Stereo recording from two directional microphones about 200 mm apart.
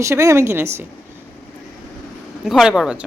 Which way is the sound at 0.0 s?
15° right (ahead or behind).